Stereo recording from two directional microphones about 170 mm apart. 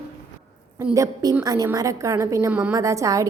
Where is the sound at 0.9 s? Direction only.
20° right (ahead or behind).